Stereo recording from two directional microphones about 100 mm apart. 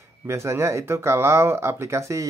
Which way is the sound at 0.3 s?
30° right (ahead or behind).